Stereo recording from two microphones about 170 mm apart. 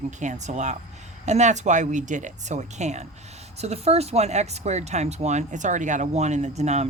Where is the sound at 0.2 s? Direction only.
45° right (ahead or behind).